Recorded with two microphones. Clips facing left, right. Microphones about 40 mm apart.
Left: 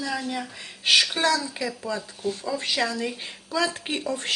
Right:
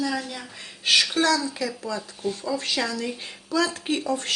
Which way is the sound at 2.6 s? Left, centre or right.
Centre.